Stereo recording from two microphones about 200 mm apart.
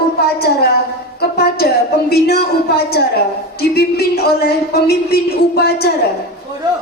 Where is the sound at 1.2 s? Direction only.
55° left (ahead or behind).